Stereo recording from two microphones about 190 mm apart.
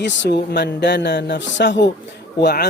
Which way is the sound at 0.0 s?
65° left (ahead or behind).